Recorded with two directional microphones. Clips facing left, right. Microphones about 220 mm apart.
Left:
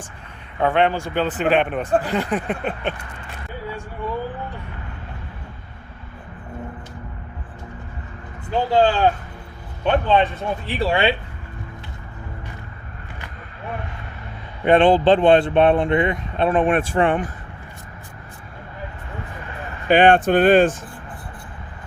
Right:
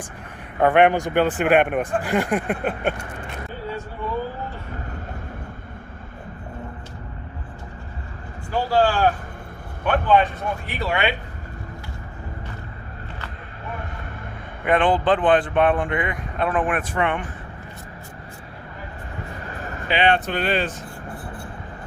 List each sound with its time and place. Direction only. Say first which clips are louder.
0.8 s a man's voice: right 4 dB; 15° right (ahead or behind)
8.4 s speech: left 2 dB; 20° left (ahead or behind)
14.6 s speech: left 5 dB; 25° left (ahead or behind)
19.9 s speech: left 7 dB; 50° left (ahead or behind)